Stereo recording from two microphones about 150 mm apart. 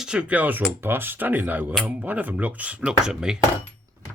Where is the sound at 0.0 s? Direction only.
5° right (ahead or behind).